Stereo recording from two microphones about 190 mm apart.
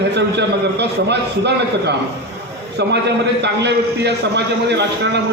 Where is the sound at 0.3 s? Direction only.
65° right (ahead or behind).